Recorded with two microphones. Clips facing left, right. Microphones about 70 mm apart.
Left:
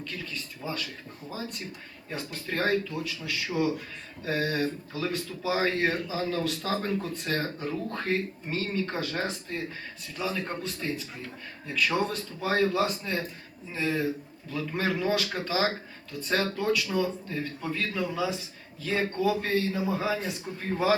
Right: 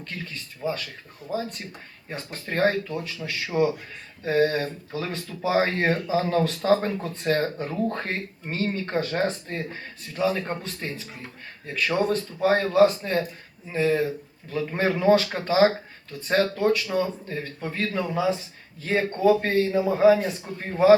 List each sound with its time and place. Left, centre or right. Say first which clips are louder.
0.6 s speech: right 7 dB; right
10.8 s speech: left 1 dB; right